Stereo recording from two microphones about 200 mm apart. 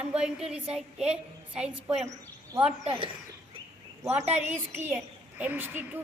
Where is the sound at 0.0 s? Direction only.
5° right (ahead or behind).